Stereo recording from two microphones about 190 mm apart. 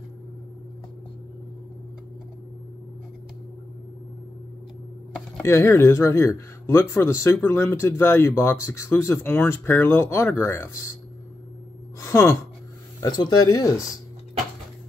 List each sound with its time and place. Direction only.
5.4 s speech: 15° left (ahead or behind)
12.0 s speech: 15° left (ahead or behind)